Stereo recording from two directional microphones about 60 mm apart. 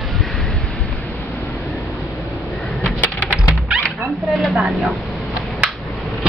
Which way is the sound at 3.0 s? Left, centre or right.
Left.